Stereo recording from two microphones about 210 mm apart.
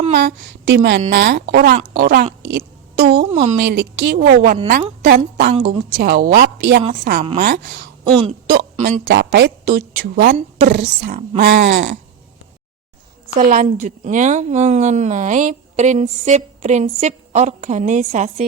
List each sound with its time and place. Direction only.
0.1 s a woman's voice: 50° right (ahead or behind)
2.4 s a sound: 55° right (ahead or behind)
3.2 s speech: 30° right (ahead or behind)
3.6 s a woman's voice: 50° right (ahead or behind)
8.8 s a woman's voice: 55° right (ahead or behind)
10.2 s a woman's voice: 35° right (ahead or behind)
10.7 s a woman's voice: 50° right (ahead or behind)
11.3 s speech: 60° right (ahead or behind)
13.3 s a woman's voice: 40° right (ahead or behind)